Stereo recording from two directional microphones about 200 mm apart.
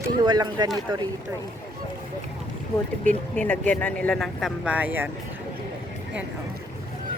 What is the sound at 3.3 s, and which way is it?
A woman's voice, 5° left (ahead or behind).